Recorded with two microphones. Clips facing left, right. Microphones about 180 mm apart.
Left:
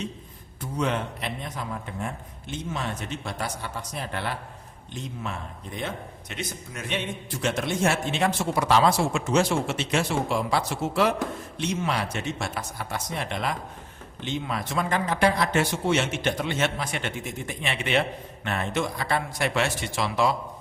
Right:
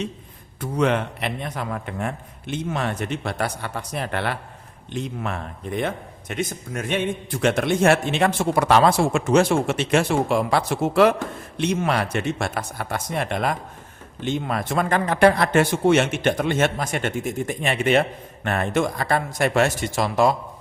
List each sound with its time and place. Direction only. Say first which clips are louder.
0.6 s a man's voice: right 6 dB; 70° right (ahead or behind); by 20.3 s 45° right (ahead or behind)